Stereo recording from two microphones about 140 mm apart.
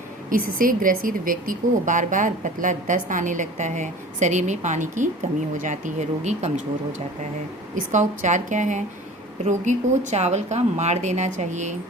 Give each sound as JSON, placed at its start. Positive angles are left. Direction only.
{"t": 0.3, "sound": "a woman's voice", "side_deg": -80}
{"t": 7.8, "sound": "speech", "side_deg": -65}